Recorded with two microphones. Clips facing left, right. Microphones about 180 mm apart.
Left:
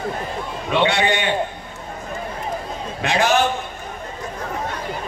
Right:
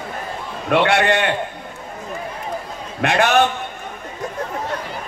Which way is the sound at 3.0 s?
60° right (ahead or behind).